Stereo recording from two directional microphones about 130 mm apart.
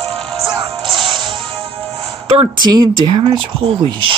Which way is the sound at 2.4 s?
35° right (ahead or behind).